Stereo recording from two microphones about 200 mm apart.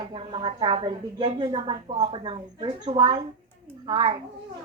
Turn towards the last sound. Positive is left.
turn(degrees=-25)  # may be behind; listen again after turning